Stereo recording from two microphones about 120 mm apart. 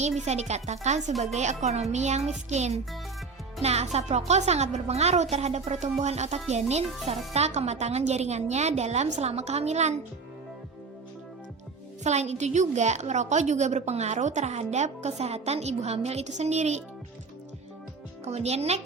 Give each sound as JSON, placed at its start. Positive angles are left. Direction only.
{"t": 0.2, "sound": "a woman's voice", "side_deg": -70}
{"t": 12.0, "sound": "a woman's voice", "side_deg": -70}
{"t": 18.3, "sound": "speech", "side_deg": -65}